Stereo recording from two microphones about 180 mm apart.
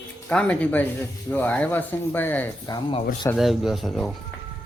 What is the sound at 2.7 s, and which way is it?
Speech, 25° left (ahead or behind).